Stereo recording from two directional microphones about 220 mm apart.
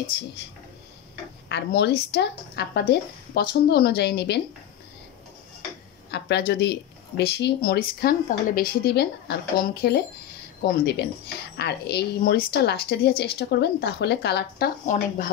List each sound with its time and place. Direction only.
1.5 s speech: 50° left (ahead or behind)
6.0 s speech: 50° left (ahead or behind)